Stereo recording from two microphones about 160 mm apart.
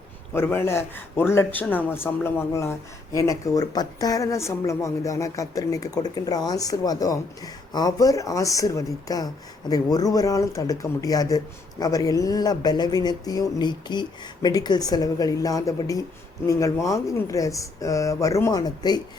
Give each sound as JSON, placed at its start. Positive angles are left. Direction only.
{"t": 0.3, "sound": "a man's voice", "side_deg": 15}